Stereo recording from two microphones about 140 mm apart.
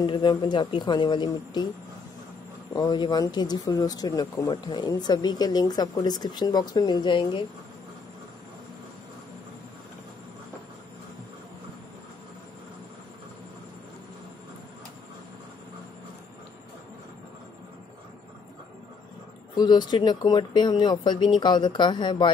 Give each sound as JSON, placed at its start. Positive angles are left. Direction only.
{"t": 0.0, "sound": "speech", "side_deg": 30}
{"t": 2.7, "sound": "speech", "side_deg": 30}
{"t": 19.5, "sound": "speech", "side_deg": 30}